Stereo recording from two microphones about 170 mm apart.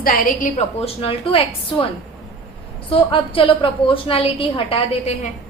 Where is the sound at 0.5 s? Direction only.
35° left (ahead or behind).